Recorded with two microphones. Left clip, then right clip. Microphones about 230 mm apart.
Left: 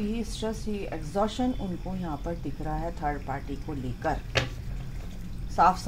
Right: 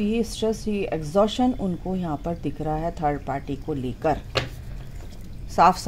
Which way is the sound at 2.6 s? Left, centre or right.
Right.